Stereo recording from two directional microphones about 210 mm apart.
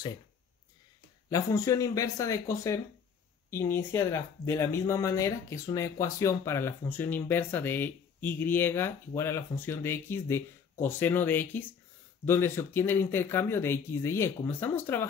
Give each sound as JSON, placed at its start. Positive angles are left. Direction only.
{"t": 1.3, "sound": "speech", "side_deg": 15}